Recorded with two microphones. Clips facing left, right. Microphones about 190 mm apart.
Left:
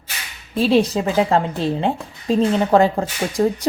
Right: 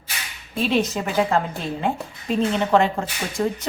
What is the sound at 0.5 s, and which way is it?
A woman's voice, 35° left (ahead or behind).